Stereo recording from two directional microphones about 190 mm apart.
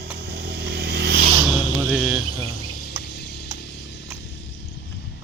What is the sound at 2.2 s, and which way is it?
Insect, 55° left (ahead or behind).